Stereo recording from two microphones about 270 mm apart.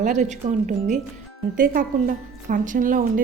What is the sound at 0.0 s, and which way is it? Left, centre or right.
A woman's voice, right.